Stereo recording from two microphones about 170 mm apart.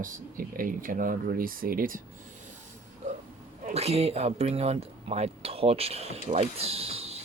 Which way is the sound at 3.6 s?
35° right (ahead or behind).